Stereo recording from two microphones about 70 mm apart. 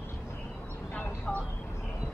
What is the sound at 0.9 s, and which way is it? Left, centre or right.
Vehicle, left.